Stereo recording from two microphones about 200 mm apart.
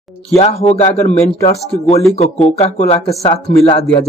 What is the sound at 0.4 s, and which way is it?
Speech, 30° left (ahead or behind).